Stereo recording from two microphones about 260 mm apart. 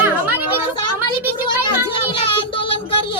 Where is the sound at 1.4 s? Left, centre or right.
Centre.